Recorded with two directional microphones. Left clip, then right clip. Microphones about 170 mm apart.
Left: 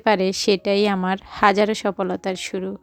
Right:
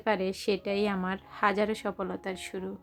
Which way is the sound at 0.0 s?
55° left (ahead or behind).